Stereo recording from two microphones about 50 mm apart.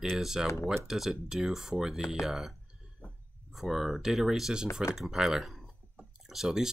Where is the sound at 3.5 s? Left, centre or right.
Centre.